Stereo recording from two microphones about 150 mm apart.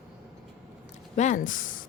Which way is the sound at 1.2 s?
55° left (ahead or behind).